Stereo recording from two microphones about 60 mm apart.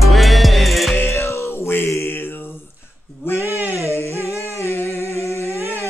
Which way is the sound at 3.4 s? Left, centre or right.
Right.